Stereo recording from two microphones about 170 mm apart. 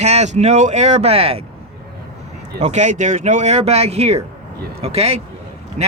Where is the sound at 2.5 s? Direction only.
45° right (ahead or behind).